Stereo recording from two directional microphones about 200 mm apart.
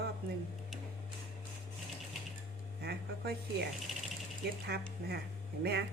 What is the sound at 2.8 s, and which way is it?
A woman's voice, 55° right (ahead or behind).